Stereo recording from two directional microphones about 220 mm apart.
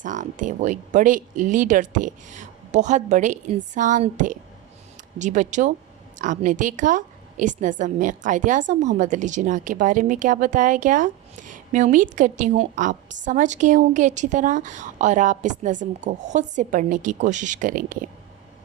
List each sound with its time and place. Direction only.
0.0 s a woman's voice: 35° right (ahead or behind)